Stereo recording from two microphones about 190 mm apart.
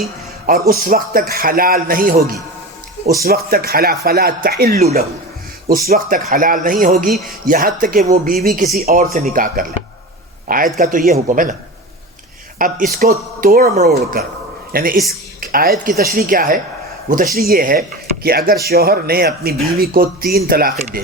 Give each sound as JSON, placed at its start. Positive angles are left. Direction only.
{"t": 0.0, "sound": "a sound", "side_deg": -50}
{"t": 0.7, "sound": "speech", "side_deg": -50}
{"t": 10.8, "sound": "speech", "side_deg": -50}
{"t": 12.5, "sound": "speech", "side_deg": -45}
{"t": 15.4, "sound": "dishes", "side_deg": -50}
{"t": 15.8, "sound": "speech", "side_deg": -50}
{"t": 20.7, "sound": "speech", "side_deg": -40}